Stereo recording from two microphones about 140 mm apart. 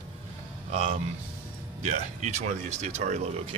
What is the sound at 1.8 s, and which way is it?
Speech, 55° right (ahead or behind).